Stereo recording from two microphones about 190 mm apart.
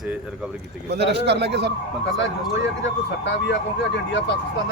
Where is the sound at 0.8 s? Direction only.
65° right (ahead or behind).